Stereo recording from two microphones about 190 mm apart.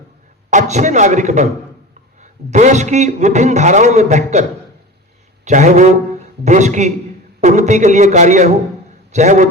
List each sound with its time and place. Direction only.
0.5 s a man's voice: 40° right (ahead or behind)
5.5 s a man's voice: 40° right (ahead or behind)